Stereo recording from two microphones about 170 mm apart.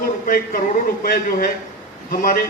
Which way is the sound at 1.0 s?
55° left (ahead or behind).